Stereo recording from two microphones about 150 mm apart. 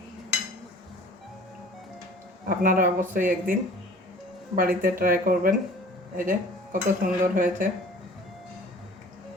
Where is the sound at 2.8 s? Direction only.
60° right (ahead or behind).